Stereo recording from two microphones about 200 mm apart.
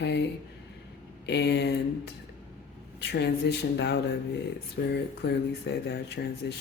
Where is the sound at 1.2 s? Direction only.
60° left (ahead or behind).